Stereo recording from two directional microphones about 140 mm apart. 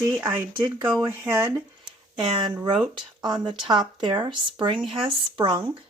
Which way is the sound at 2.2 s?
35° right (ahead or behind).